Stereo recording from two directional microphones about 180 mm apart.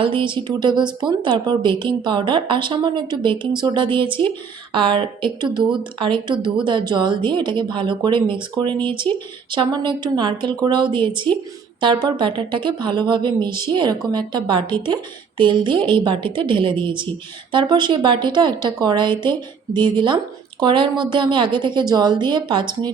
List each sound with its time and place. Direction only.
0.0 s a woman's voice: 30° right (ahead or behind)